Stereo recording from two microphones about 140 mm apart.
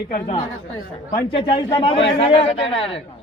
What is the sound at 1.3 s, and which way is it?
A man's voice, 40° left (ahead or behind).